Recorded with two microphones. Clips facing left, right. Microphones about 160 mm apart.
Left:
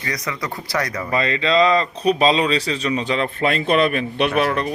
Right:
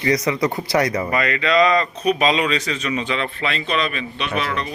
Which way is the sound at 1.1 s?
25° left (ahead or behind).